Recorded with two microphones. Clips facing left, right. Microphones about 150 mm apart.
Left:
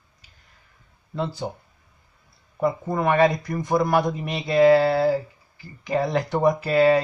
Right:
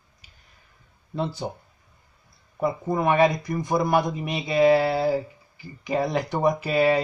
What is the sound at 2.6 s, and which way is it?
Speech, 10° right (ahead or behind).